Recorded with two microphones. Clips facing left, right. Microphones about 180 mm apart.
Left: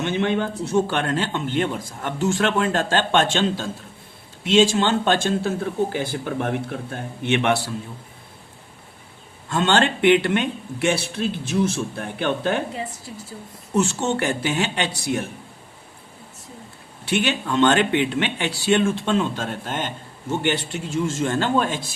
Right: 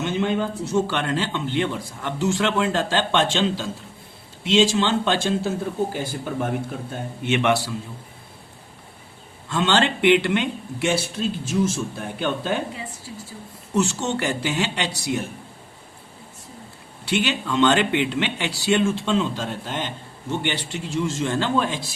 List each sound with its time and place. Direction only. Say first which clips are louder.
0.0 s speech: left 1 dB; 60° left (ahead or behind)
6.0 s speech: left 1 dB; 70° left (ahead or behind)
9.5 s speech: left 1 dB; 50° left (ahead or behind)
13.7 s speech: left 1 dB; 50° left (ahead or behind)
17.1 s speech: left 1 dB; 50° left (ahead or behind)